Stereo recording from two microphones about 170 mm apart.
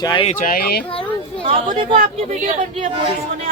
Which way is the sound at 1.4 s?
30° right (ahead or behind).